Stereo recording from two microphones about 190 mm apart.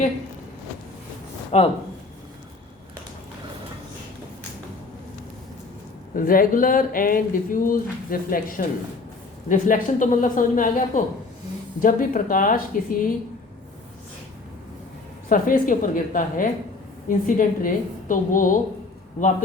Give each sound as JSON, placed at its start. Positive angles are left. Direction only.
{"t": 1.5, "sound": "speech", "side_deg": 35}
{"t": 6.1, "sound": "speech", "side_deg": 50}
{"t": 15.3, "sound": "speech", "side_deg": 45}